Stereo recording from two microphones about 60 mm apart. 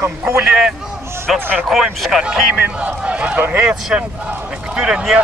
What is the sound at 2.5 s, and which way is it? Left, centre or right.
A man's voice, right.